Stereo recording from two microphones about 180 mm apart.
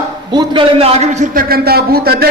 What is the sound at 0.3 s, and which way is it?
A man's voice, 25° right (ahead or behind).